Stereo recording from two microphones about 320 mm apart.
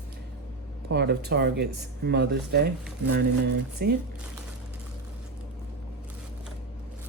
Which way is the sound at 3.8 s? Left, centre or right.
Right.